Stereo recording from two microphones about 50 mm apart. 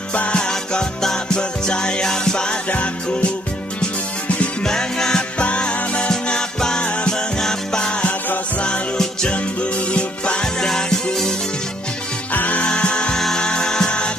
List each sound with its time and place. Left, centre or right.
0.1 s music: left
4.6 s music: centre
12.3 s music: left
12.6 s music: centre